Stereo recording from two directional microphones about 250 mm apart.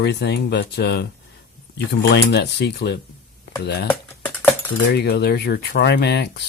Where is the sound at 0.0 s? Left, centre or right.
Left.